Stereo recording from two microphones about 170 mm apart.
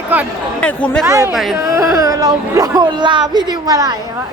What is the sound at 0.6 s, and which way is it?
Speech, 5° left (ahead or behind).